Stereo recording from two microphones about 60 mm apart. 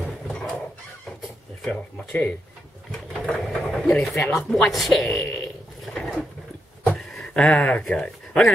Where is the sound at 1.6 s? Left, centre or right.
Centre.